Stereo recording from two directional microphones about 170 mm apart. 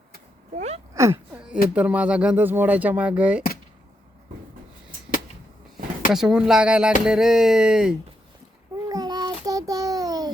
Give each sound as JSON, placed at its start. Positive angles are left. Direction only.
{"t": 0.5, "sound": "speech", "side_deg": -40}
{"t": 0.9, "sound": "speech", "side_deg": -15}
{"t": 6.1, "sound": "speech", "side_deg": -5}
{"t": 8.9, "sound": "child singing", "side_deg": -20}